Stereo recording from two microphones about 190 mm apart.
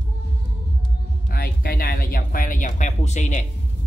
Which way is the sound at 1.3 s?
50° left (ahead or behind).